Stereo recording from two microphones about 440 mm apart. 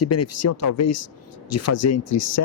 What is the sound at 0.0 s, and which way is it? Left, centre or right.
Speech, left.